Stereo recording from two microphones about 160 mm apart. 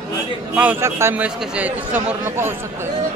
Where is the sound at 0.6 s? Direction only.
15° right (ahead or behind).